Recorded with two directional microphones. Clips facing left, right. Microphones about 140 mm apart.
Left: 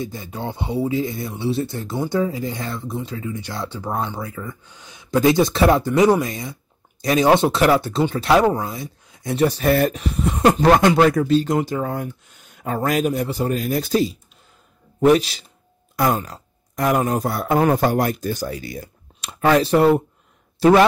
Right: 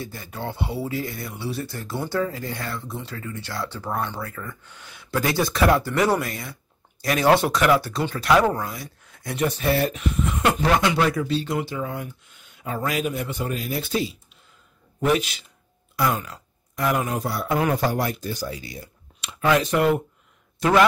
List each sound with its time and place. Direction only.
0.0 s speech: 20° left (ahead or behind)
9.4 s speech: 35° left (ahead or behind)
9.7 s speech: 50° left (ahead or behind)
10.6 s speech: 50° left (ahead or behind)
19.2 s speech: 40° left (ahead or behind)